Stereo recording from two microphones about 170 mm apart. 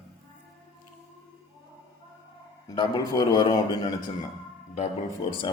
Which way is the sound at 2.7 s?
25° left (ahead or behind).